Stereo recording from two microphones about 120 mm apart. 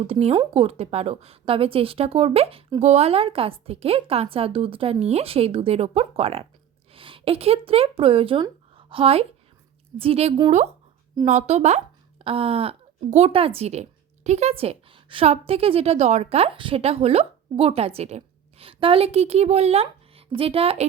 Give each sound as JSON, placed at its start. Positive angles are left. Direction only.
{"t": 0.1, "sound": "a woman's voice", "side_deg": -60}
{"t": 11.3, "sound": "speech", "side_deg": -70}
{"t": 12.2, "sound": "a woman's voice", "side_deg": -55}
{"t": 18.6, "sound": "speech", "side_deg": -45}